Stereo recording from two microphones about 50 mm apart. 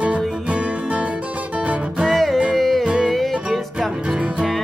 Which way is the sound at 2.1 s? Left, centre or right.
Centre.